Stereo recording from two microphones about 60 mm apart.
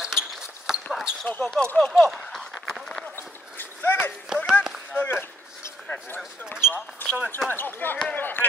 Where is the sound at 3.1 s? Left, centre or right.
Left.